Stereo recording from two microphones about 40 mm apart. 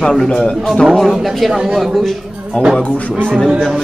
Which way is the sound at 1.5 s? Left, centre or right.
Centre.